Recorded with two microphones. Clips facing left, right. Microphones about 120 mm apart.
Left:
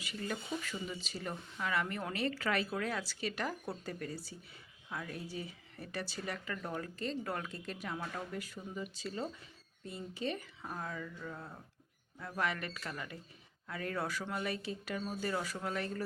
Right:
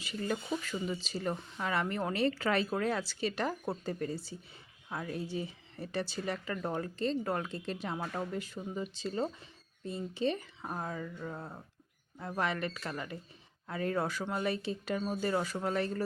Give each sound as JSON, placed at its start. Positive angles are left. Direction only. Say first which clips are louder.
{"t": 0.0, "sound": "speech", "louder": "right 5 dB", "side_deg": -30}